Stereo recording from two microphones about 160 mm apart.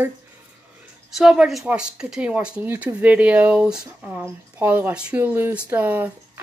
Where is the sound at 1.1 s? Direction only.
5° right (ahead or behind).